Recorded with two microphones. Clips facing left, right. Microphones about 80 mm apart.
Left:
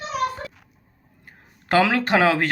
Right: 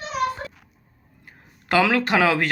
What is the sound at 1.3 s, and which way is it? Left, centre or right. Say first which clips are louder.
Speech: left 1 dB; left.